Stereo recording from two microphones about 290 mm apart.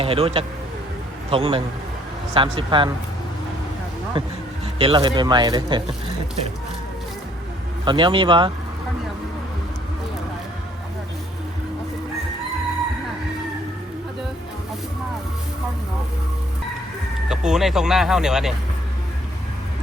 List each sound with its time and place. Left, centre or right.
0.0 s a man's voice: centre
4.1 s speech: centre
7.9 s speech: centre
17.2 s speech: centre